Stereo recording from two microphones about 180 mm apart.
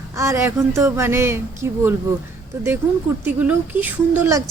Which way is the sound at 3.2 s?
10° right (ahead or behind).